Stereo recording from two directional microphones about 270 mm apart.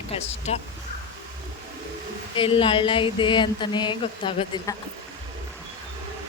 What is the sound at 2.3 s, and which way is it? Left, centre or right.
Speech, centre.